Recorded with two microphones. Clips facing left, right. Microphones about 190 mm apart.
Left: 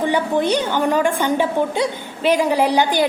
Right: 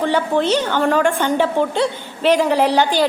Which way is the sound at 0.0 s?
15° left (ahead or behind).